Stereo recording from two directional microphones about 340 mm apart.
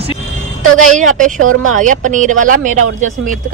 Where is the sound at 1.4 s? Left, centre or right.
Right.